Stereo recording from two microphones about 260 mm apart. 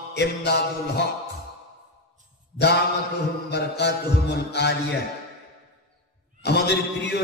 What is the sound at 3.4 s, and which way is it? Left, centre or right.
A man's voice, left.